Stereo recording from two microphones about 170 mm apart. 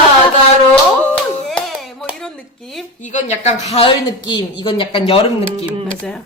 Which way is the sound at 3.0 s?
45° left (ahead or behind).